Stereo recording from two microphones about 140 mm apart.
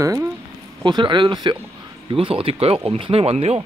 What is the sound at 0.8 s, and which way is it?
Speech, 35° right (ahead or behind).